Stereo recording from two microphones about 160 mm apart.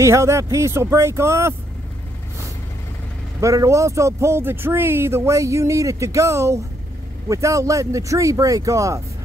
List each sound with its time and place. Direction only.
0.0 s speech: 15° right (ahead or behind)
3.3 s speech: 20° right (ahead or behind)